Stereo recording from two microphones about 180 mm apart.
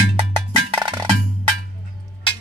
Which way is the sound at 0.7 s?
25° right (ahead or behind).